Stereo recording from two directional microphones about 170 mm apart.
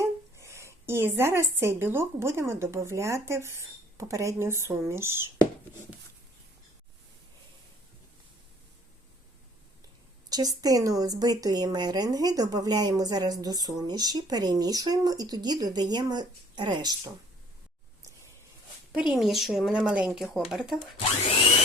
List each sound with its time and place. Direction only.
0.0 s a woman's voice: 15° right (ahead or behind)
10.2 s a woman's voice: 20° right (ahead or behind)
19.1 s speech: centre (ahead or behind)